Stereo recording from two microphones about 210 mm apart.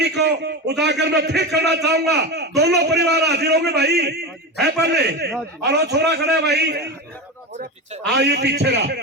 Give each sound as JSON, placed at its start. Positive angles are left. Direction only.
{"t": 0.0, "sound": "a man's voice", "side_deg": -55}
{"t": 8.1, "sound": "a man's voice", "side_deg": -55}